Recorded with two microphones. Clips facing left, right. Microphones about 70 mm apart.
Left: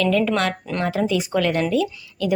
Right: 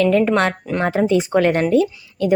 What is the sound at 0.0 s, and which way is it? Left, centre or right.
Speech, right.